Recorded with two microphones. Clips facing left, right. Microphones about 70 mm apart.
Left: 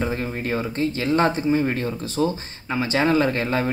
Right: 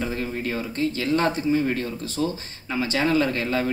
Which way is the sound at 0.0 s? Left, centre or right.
Left.